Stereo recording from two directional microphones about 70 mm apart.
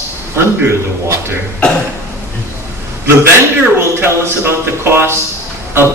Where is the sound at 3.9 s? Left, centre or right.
Right.